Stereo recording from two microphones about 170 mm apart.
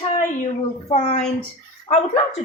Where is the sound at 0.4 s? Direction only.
40° left (ahead or behind).